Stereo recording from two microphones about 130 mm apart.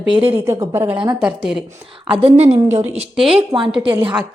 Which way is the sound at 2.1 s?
50° right (ahead or behind).